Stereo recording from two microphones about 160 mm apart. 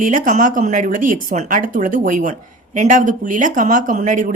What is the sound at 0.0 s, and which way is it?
A woman's voice, 55° right (ahead or behind).